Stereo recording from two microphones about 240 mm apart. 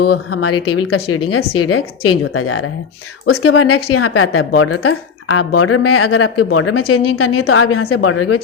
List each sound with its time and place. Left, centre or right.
0.8 s speech: left